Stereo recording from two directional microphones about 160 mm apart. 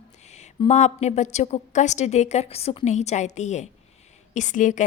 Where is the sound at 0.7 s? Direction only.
45° left (ahead or behind).